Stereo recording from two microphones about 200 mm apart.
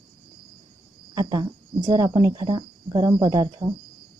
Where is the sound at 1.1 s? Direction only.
20° right (ahead or behind).